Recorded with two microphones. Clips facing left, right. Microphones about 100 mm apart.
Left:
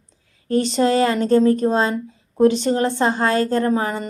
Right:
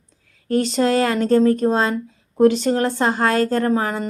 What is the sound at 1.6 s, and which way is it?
Speech, centre (ahead or behind).